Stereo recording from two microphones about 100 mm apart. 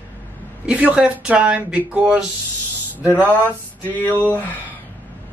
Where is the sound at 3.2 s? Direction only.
15° left (ahead or behind).